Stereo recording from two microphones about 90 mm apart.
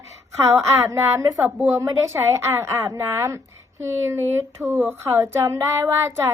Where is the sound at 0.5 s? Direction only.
30° right (ahead or behind).